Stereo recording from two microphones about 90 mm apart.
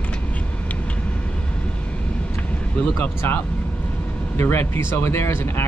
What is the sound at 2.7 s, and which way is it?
Speech, 20° left (ahead or behind).